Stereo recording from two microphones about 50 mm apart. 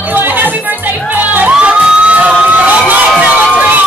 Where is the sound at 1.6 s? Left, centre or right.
Right.